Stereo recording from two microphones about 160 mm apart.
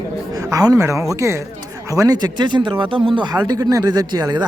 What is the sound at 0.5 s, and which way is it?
A man's voice, 20° right (ahead or behind).